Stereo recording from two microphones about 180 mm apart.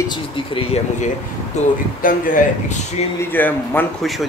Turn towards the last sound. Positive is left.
turn(degrees=10)  # may be behind; listen again after turning